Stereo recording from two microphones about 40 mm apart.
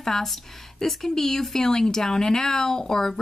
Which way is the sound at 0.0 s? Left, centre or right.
Centre.